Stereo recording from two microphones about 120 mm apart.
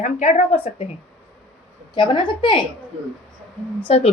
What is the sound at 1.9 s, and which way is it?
Speech, 45° left (ahead or behind).